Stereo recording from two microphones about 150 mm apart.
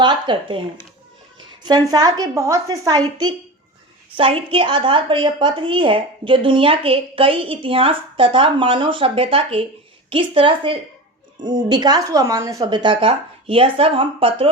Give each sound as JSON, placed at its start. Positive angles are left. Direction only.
{"t": 0.0, "sound": "speech", "side_deg": -30}
{"t": 1.6, "sound": "a woman's voice", "side_deg": -25}
{"t": 4.2, "sound": "speech", "side_deg": -40}